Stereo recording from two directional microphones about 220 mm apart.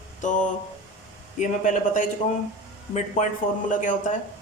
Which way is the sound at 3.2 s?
35° left (ahead or behind).